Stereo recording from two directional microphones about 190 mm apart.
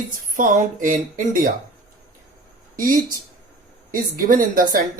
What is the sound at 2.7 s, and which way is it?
Speech, 45° right (ahead or behind).